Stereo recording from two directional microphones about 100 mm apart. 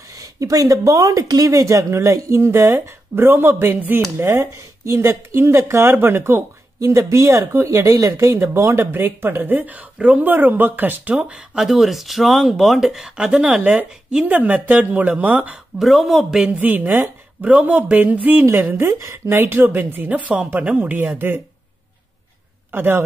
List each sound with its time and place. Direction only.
0.1 s speech: 35° right (ahead or behind); by 15.6 s 15° right (ahead or behind)
15.8 s speech: centre (ahead or behind); by 21.4 s 20° right (ahead or behind)
22.7 s a man's voice: 20° right (ahead or behind)